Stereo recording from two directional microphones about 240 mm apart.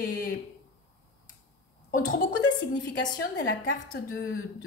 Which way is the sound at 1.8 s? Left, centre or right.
Left.